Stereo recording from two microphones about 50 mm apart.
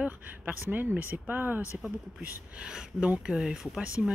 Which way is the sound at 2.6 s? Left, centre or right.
Centre.